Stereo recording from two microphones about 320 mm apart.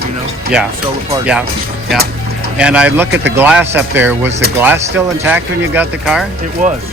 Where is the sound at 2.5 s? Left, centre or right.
Centre.